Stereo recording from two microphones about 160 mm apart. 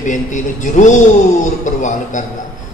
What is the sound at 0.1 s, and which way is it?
A man's voice, 50° left (ahead or behind).